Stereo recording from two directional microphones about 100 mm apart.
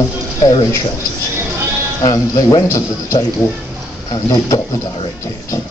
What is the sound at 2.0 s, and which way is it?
A man's voice, 35° left (ahead or behind).